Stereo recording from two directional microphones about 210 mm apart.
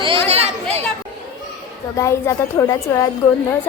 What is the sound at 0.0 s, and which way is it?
Chatter, 25° right (ahead or behind).